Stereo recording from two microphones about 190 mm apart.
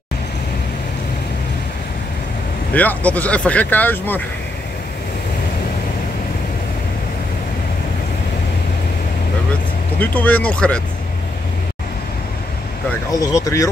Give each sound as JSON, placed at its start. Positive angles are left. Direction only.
{"t": 2.7, "sound": "speech", "side_deg": 10}
{"t": 9.9, "sound": "speech", "side_deg": 10}
{"t": 13.2, "sound": "speech", "side_deg": 15}